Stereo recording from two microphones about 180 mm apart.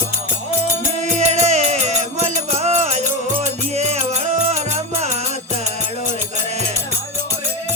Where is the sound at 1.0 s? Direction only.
40° right (ahead or behind).